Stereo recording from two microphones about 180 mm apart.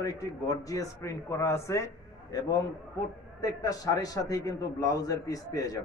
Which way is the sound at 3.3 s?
20° left (ahead or behind).